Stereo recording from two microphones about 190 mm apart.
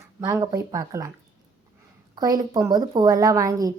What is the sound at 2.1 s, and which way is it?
A woman's voice, 20° right (ahead or behind).